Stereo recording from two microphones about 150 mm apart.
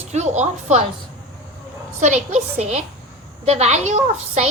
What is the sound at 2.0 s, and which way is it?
A woman's voice, 50° right (ahead or behind).